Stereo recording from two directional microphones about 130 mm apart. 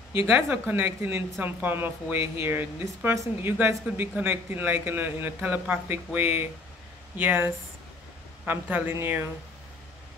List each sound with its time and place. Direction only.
0.3 s speech: 15° right (ahead or behind)